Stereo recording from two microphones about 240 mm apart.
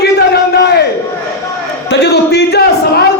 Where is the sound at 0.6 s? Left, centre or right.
Left.